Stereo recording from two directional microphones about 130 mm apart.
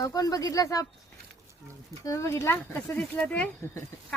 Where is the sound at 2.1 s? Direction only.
20° left (ahead or behind).